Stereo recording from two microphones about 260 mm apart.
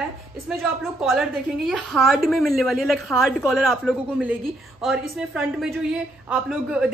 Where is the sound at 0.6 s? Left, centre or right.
Centre.